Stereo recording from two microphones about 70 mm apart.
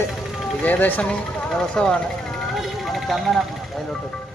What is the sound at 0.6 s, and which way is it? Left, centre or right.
Speech, left.